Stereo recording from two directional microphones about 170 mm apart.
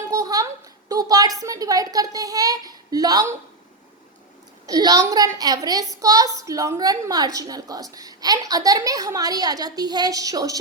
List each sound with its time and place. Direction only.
0.1 s a sound: 20° right (ahead or behind)
1.4 s a woman's voice: 20° right (ahead or behind)
4.6 s a woman's voice: 20° right (ahead or behind)